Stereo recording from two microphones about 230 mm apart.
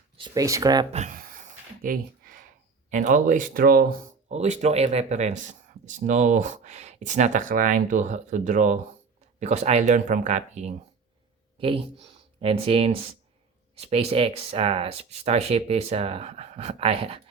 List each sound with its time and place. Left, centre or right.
0.2 s speech: centre
0.9 s a sound: right
2.9 s speech: right
12.4 s speech: right